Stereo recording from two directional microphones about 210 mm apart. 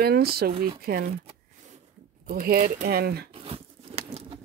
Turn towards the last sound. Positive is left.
turn(degrees=-30)  # may be behind; listen again after turning